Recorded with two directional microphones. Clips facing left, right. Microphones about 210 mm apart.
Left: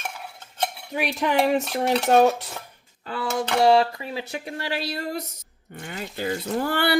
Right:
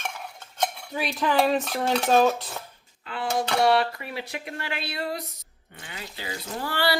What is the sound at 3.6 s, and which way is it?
Speech, 25° left (ahead or behind).